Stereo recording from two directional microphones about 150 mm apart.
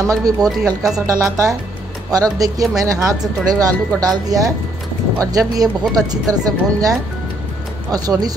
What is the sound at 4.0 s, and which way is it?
Speech, 25° right (ahead or behind).